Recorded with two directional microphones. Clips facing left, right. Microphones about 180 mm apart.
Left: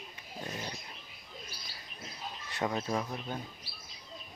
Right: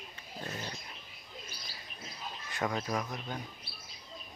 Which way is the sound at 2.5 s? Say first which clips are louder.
Left 1 dB; 20° left (ahead or behind).